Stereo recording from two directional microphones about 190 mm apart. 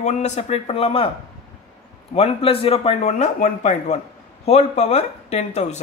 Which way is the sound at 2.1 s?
30° left (ahead or behind).